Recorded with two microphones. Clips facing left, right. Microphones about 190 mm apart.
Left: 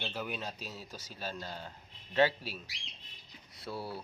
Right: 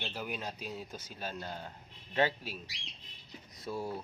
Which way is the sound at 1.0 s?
50° right (ahead or behind).